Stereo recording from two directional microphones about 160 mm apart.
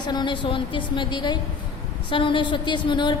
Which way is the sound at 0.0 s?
25° left (ahead or behind).